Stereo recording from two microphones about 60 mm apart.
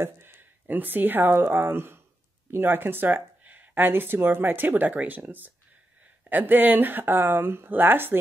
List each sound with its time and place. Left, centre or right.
0.0 s speech: right